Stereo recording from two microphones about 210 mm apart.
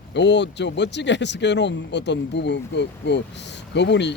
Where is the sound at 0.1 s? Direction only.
55° left (ahead or behind).